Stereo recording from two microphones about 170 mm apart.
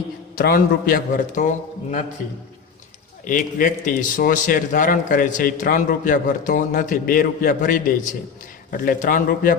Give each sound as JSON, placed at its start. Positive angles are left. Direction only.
{"t": 0.3, "sound": "a man's voice", "side_deg": 60}
{"t": 3.2, "sound": "a man's voice", "side_deg": 50}